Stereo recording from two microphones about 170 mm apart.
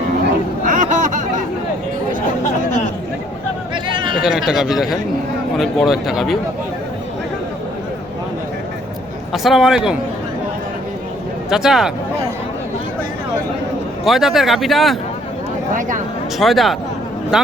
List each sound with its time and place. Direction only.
0.6 s a sound: 50° right (ahead or behind)
3.8 s chatter: 30° right (ahead or behind)
4.2 s speech: centre (ahead or behind)
9.3 s speech: centre (ahead or behind)
11.4 s speech: centre (ahead or behind)
14.0 s speech: centre (ahead or behind)
16.4 s a man's voice: centre (ahead or behind)